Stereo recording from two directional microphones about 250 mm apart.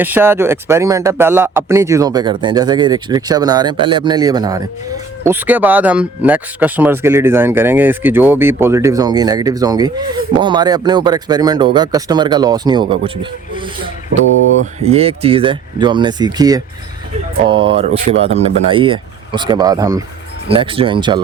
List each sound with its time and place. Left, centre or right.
0.0 s speech: centre
14.1 s a sound: right
14.8 s speech: right